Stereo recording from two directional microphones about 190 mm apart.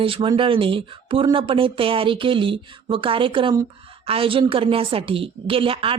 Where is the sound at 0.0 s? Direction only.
25° right (ahead or behind).